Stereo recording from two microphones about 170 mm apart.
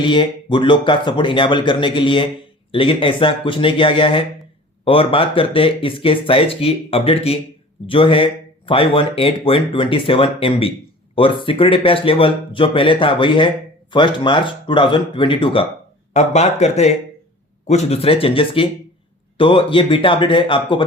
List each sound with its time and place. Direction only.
0.0 s speech: 30° left (ahead or behind)